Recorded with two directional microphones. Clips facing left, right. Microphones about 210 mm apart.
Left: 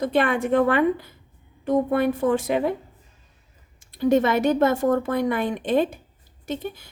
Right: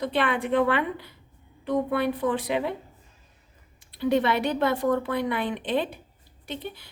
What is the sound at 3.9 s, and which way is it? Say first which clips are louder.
A woman's voice: left 4 dB; 45° left (ahead or behind).